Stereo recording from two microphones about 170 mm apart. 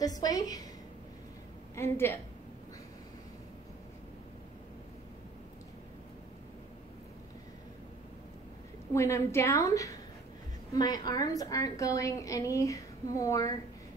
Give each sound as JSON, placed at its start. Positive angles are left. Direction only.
{"t": 0.0, "sound": "a woman's voice", "side_deg": 20}
{"t": 1.8, "sound": "a woman's voice", "side_deg": 15}
{"t": 8.9, "sound": "a woman's voice", "side_deg": 15}